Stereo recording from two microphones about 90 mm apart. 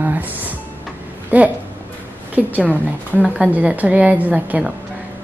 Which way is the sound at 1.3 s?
15° right (ahead or behind).